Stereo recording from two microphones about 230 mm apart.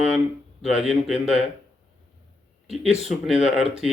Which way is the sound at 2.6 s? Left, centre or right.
Centre.